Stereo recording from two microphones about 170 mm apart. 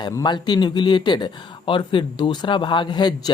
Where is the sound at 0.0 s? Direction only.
25° left (ahead or behind).